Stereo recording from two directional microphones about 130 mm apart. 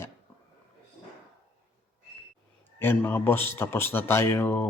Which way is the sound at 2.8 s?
15° left (ahead or behind).